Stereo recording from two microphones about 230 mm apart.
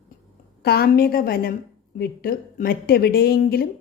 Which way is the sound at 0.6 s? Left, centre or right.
Left.